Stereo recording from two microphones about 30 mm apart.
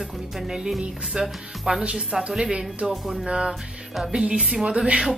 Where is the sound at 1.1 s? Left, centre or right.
Right.